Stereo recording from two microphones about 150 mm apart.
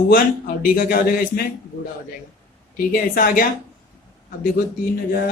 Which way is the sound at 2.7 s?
65° left (ahead or behind).